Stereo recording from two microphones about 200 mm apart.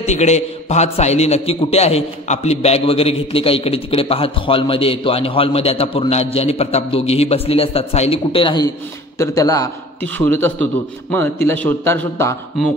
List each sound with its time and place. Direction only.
0.0 s a man's voice: 35° left (ahead or behind); by 12.4 s 10° left (ahead or behind)